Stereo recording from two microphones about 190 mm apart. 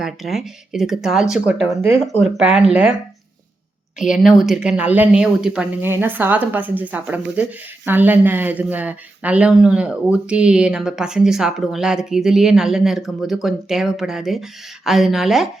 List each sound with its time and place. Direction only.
0.0 s speech: centre (ahead or behind)
3.9 s speech: 5° right (ahead or behind)